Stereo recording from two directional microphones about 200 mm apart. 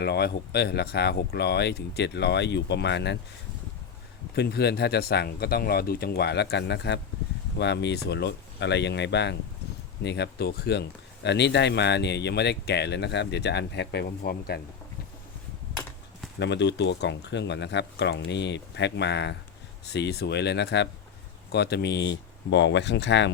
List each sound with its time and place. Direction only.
0.0 s speech: 55° left (ahead or behind)
4.4 s speech: 55° left (ahead or behind)
16.4 s speech: 60° left (ahead or behind)